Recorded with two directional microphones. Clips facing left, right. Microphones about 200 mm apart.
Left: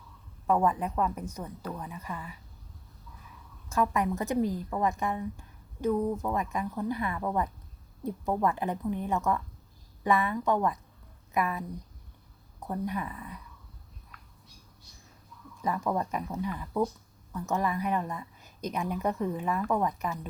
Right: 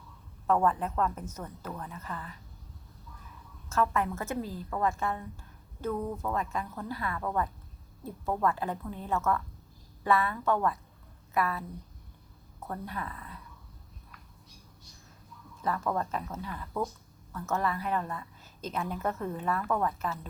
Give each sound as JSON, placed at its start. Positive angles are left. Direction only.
{"t": 0.4, "sound": "a woman's voice", "side_deg": 10}
{"t": 3.7, "sound": "a woman's voice", "side_deg": 15}
{"t": 12.6, "sound": "a woman's voice", "side_deg": 15}
{"t": 15.6, "sound": "a woman's voice", "side_deg": 15}